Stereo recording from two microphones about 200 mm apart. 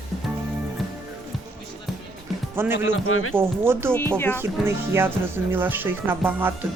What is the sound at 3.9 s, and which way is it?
Speech, 10° left (ahead or behind).